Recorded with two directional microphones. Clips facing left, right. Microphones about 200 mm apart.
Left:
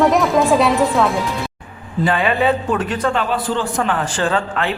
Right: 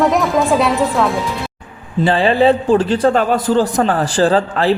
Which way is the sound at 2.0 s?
30° right (ahead or behind).